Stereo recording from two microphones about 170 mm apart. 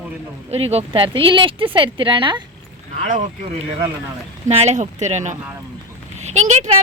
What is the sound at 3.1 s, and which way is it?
Speech, 45° right (ahead or behind).